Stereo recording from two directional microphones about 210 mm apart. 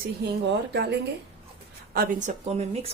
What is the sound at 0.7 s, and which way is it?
Speech, 55° right (ahead or behind).